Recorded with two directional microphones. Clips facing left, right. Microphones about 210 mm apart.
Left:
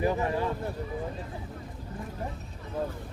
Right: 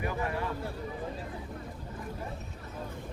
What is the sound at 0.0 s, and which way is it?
Speech, 30° left (ahead or behind).